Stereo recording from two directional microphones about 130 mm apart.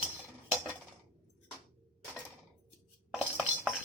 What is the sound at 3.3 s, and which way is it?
Dishes, 10° right (ahead or behind).